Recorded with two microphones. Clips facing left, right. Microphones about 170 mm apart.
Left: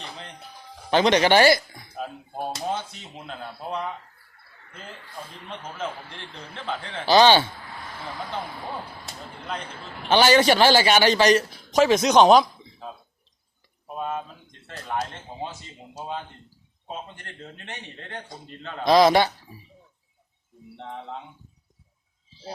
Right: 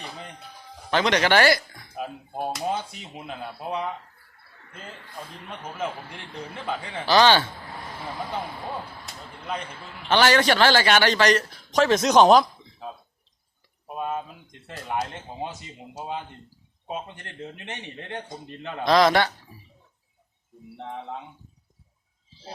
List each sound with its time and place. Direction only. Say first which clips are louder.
0.0 s speech: right 1 dB; 10° right (ahead or behind)
0.9 s speech: left 3 dB; 20° left (ahead or behind)
2.0 s speech: right 1 dB; 10° right (ahead or behind)
5.7 s speech: right 3 dB; 10° right (ahead or behind)
7.1 s speech: left 2 dB; 20° left (ahead or behind)
10.1 s speech: left 2 dB; 10° left (ahead or behind); by 18.9 s 15° right (ahead or behind)
18.9 s speech: left 2 dB; 15° left (ahead or behind)
20.7 s speech: right 1 dB; 10° right (ahead or behind)